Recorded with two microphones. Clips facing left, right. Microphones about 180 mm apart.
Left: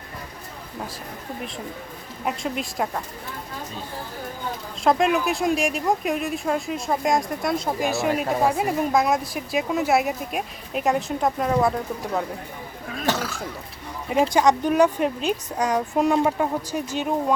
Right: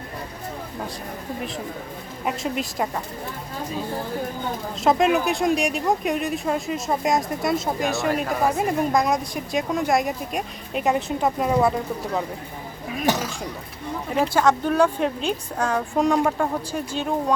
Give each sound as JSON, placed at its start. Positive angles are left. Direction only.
{"t": 2.2, "sound": "speech", "side_deg": 0}
{"t": 4.8, "sound": "speech", "side_deg": 0}
{"t": 13.0, "sound": "speech", "side_deg": -20}
{"t": 14.2, "sound": "a woman's voice", "side_deg": 15}